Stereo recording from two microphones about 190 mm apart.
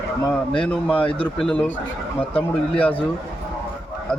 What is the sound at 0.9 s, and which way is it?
Speech, 25° left (ahead or behind).